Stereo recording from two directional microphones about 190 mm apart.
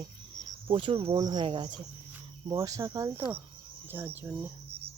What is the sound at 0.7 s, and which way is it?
Speech, 25° right (ahead or behind).